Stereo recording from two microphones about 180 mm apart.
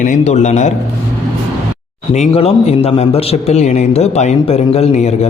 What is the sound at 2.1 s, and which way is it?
A man's voice, 35° left (ahead or behind).